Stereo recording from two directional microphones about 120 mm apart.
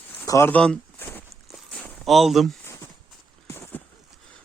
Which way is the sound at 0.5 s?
5° left (ahead or behind).